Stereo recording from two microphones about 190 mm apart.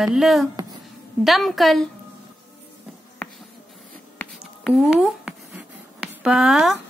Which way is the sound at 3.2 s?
5° left (ahead or behind).